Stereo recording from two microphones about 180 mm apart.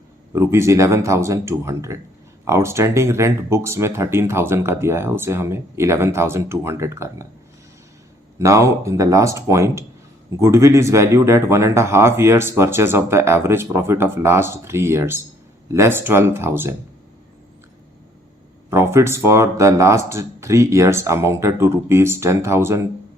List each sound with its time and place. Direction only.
0.3 s speech: 15° right (ahead or behind)
8.4 s speech: 15° right (ahead or behind)
18.7 s speech: 15° right (ahead or behind)